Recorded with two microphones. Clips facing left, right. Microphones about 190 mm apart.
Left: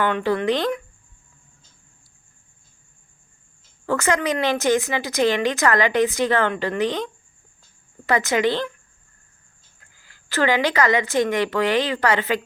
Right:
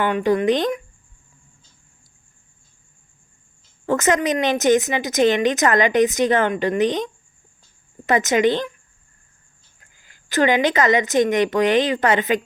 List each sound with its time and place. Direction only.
0.0 s speech: 15° right (ahead or behind)
3.8 s a woman's voice: 20° right (ahead or behind)
9.9 s a woman's voice: 20° right (ahead or behind)